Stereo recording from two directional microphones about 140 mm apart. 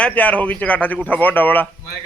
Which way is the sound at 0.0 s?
10° left (ahead or behind).